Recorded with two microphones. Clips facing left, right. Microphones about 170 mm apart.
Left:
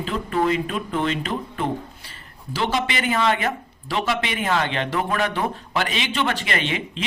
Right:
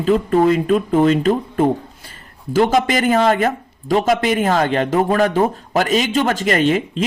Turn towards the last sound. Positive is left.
turn(degrees=-45)  # may be behind; listen again after turning